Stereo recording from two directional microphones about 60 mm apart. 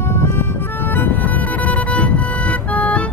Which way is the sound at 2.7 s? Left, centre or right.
Left.